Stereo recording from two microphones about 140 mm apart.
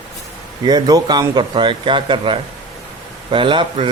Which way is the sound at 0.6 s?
30° right (ahead or behind).